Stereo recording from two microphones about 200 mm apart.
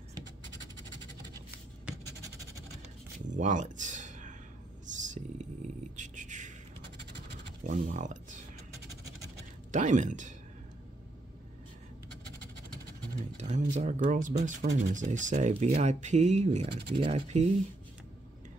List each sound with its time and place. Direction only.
3.3 s a sound: 40° right (ahead or behind)
5.9 s beatboxing: 40° right (ahead or behind)
7.6 s speech: 40° right (ahead or behind)
9.7 s speech: 40° right (ahead or behind)
13.4 s speech: 35° right (ahead or behind)